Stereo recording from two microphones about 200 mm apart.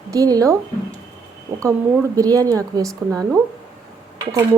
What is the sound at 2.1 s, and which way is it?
Speech, 15° right (ahead or behind).